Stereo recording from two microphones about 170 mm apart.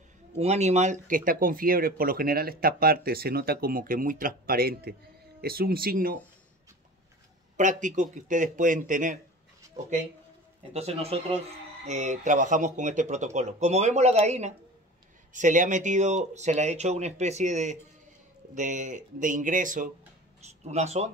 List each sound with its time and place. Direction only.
0.4 s speech: 40° right (ahead or behind); by 6.1 s 60° right (ahead or behind)
7.5 s speech: 45° right (ahead or behind)
10.7 s speech: 35° right (ahead or behind)